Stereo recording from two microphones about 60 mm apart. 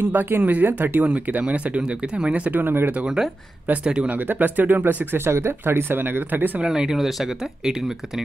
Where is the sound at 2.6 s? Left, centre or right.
Right.